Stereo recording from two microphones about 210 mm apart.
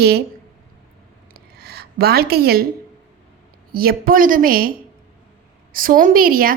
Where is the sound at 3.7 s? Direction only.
45° right (ahead or behind).